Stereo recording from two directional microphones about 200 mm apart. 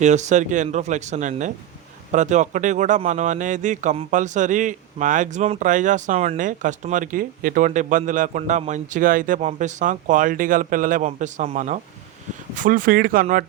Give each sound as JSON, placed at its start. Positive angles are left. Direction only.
{"t": 0.0, "sound": "speech", "side_deg": -35}